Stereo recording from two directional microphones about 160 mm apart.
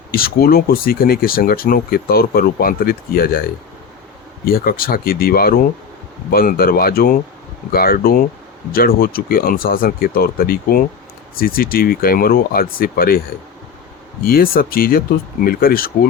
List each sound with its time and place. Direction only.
0.1 s speech: 70° left (ahead or behind)
4.4 s speech: 65° left (ahead or behind)
14.3 s speech: 65° left (ahead or behind)